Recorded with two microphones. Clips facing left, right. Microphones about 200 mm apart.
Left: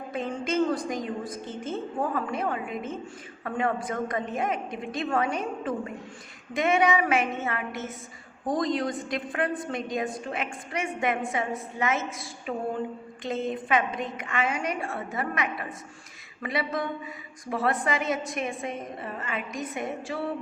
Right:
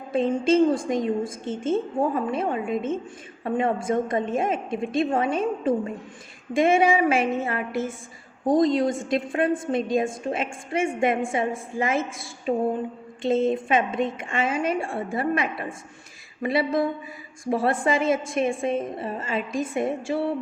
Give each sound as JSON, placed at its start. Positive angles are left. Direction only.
{"t": 0.1, "sound": "a woman's voice", "side_deg": -25}